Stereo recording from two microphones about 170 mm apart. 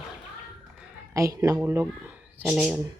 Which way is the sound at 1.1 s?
20° right (ahead or behind).